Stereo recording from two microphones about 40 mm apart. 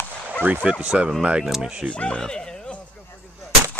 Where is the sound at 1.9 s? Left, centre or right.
Left.